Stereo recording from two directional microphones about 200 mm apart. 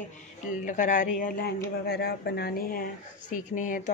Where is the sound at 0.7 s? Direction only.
40° left (ahead or behind).